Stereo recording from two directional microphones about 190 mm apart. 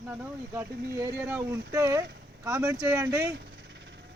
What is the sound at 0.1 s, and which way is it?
Speech, 10° right (ahead or behind).